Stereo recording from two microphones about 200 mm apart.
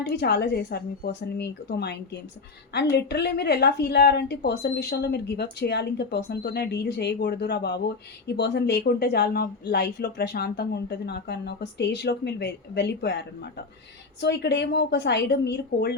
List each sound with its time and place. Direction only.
0.1 s speech: 55° left (ahead or behind)